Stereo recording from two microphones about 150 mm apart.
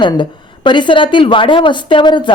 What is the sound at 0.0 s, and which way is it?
Speech, 30° left (ahead or behind).